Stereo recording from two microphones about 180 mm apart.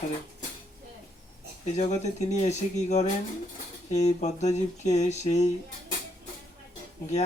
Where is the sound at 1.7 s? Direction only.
40° left (ahead or behind).